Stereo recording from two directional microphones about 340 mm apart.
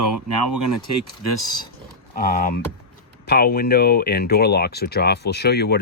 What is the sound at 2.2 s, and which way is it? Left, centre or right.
Speech, left.